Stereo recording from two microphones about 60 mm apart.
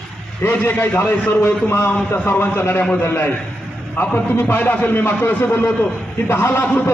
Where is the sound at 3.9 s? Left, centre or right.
Left.